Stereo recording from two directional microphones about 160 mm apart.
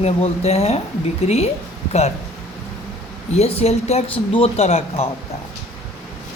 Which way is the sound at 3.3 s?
40° left (ahead or behind).